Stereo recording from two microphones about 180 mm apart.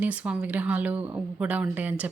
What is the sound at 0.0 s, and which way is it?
Speech, 10° right (ahead or behind).